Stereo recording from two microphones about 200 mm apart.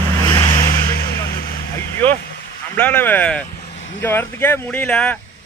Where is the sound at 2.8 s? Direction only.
10° left (ahead or behind).